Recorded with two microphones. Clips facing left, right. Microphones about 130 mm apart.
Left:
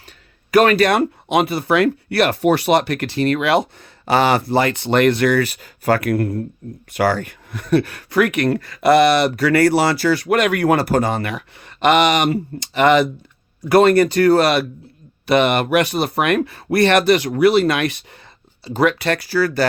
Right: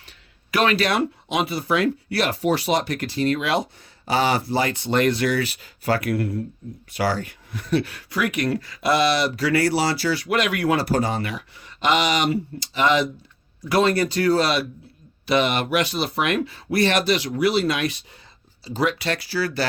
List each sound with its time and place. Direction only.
0.5 s speech: 50° left (ahead or behind)